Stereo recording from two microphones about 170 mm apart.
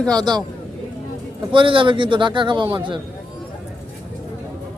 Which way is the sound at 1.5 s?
30° right (ahead or behind).